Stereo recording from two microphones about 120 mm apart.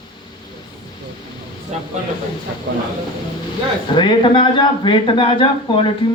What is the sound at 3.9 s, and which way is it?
Speech, 40° left (ahead or behind).